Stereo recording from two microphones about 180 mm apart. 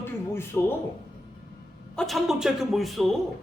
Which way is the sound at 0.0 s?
15° left (ahead or behind).